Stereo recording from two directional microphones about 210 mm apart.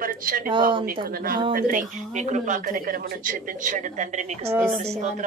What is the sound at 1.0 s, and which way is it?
Speech, 45° right (ahead or behind).